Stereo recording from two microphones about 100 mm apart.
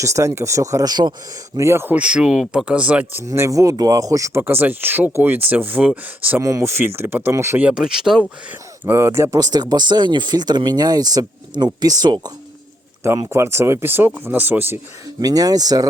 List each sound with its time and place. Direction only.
0.0 s speech: 30° right (ahead or behind)
1.5 s speech: 25° right (ahead or behind)
2.0 s speech: 10° right (ahead or behind)
3.2 s speech: 30° right (ahead or behind)
6.4 s speech: 30° right (ahead or behind)
7.6 s speech: 10° right (ahead or behind)
8.4 s speech: 15° right (ahead or behind)
9.0 s speech: 25° right (ahead or behind); by 12.3 s 45° right (ahead or behind)
13.3 s speech: 25° right (ahead or behind)
15.0 s speech: 40° right (ahead or behind)